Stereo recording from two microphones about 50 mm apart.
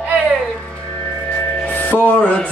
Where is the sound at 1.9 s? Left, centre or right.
Left.